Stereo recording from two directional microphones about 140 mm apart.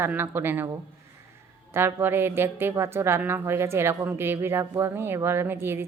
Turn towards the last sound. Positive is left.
turn(degrees=-15)  # may be behind; listen again after turning